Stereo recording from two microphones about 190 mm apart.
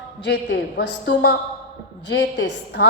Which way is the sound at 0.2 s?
65° left (ahead or behind).